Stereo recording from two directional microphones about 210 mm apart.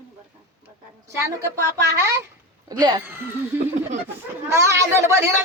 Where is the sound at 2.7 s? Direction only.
20° right (ahead or behind).